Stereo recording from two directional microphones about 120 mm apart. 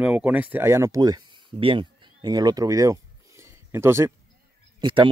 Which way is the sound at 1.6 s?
45° right (ahead or behind).